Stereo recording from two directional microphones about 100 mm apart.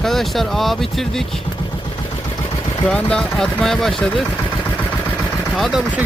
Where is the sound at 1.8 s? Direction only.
60° left (ahead or behind).